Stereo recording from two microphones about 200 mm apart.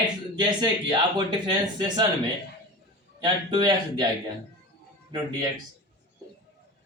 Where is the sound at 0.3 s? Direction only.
20° right (ahead or behind).